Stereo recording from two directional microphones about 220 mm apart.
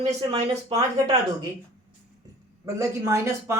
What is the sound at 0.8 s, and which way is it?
Speech, 15° right (ahead or behind).